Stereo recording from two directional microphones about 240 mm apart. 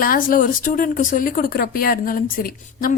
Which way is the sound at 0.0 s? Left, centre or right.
Left.